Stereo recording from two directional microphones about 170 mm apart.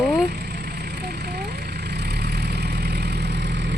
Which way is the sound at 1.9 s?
70° right (ahead or behind).